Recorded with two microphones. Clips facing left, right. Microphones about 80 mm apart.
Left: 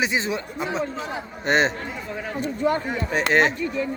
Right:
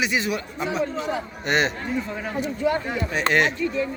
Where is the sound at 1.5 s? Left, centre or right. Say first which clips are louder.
Left 2 dB; left.